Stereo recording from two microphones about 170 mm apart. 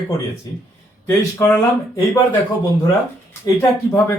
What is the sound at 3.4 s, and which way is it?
Speech, 15° left (ahead or behind).